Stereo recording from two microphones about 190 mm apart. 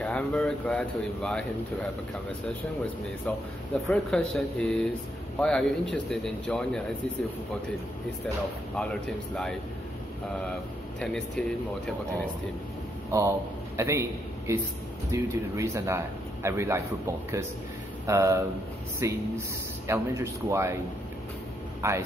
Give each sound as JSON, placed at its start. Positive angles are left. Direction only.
{"t": 0.0, "sound": "speech", "side_deg": 0}
{"t": 3.3, "sound": "speech", "side_deg": 5}
{"t": 8.7, "sound": "speech", "side_deg": 5}
{"t": 11.0, "sound": "speech", "side_deg": 5}
{"t": 13.1, "sound": "a man's voice", "side_deg": -15}
{"t": 21.8, "sound": "a man's voice", "side_deg": -15}